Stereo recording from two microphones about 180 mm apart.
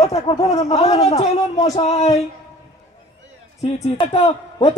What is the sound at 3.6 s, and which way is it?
Speech, 30° left (ahead or behind).